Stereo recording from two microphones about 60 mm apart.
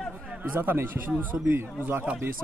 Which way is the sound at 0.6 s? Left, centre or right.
Right.